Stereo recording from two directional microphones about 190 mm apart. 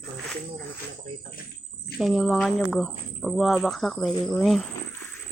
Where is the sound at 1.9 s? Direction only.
Centre (ahead or behind).